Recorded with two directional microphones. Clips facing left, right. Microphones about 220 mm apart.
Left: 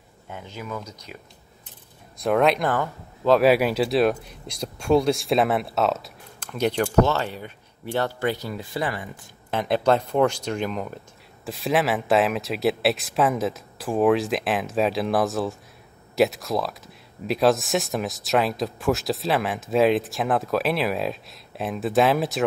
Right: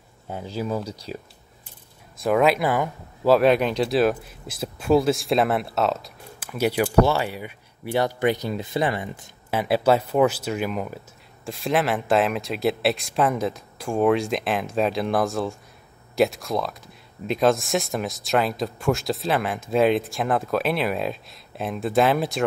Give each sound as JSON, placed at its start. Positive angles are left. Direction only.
{"t": 0.3, "sound": "speech", "side_deg": -35}
{"t": 2.1, "sound": "speech", "side_deg": 0}
{"t": 3.3, "sound": "speech", "side_deg": 5}
{"t": 9.5, "sound": "speech", "side_deg": -5}